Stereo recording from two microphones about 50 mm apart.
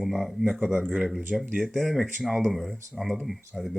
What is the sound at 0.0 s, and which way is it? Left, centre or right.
Speech, centre.